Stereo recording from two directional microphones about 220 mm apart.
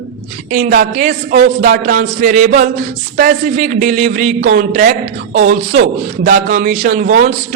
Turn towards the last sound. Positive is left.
turn(degrees=-35)  # may be behind; listen again after turning